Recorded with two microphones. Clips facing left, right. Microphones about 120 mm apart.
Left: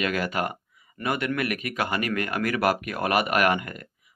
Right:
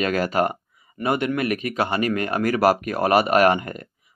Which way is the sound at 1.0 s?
25° right (ahead or behind).